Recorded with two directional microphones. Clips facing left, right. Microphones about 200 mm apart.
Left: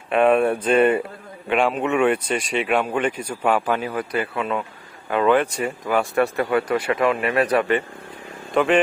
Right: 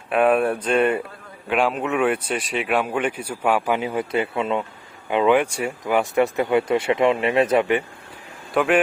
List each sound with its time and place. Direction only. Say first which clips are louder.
0.1 s speech: left 1 dB; 5° right (ahead or behind)
3.8 s speech: right 2 dB; 20° right (ahead or behind)
8.5 s speech: left 1 dB; 5° right (ahead or behind)